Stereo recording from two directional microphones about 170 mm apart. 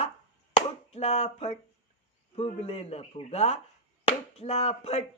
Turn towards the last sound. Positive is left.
turn(degrees=35)  # may be behind; listen again after turning